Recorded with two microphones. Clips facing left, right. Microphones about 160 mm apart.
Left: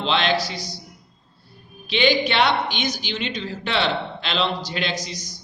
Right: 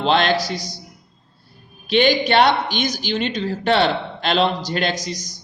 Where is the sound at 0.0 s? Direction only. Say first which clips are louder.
Right 4 dB; 45° right (ahead or behind).